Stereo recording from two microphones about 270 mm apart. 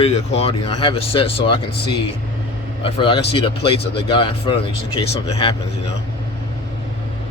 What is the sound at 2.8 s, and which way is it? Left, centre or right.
Speech, centre.